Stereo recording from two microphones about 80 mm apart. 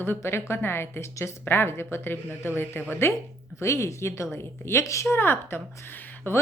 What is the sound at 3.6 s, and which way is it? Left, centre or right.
A woman's voice, left.